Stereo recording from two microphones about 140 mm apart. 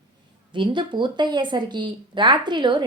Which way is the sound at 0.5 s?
35° right (ahead or behind).